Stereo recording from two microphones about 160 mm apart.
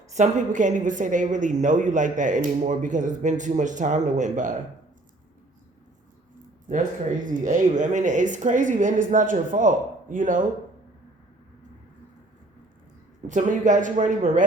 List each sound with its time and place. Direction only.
0.1 s a woman's voice: 50° right (ahead or behind)
6.7 s a woman's voice: 55° right (ahead or behind)
13.2 s a woman's voice: 50° right (ahead or behind)